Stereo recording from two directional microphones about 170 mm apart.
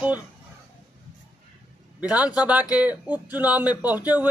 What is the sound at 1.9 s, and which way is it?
A man's voice, 10° right (ahead or behind).